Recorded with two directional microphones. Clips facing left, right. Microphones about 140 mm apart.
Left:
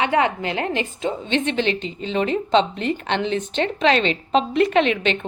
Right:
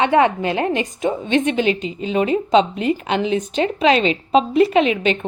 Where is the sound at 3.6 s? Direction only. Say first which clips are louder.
Right 3 dB; 35° left (ahead or behind).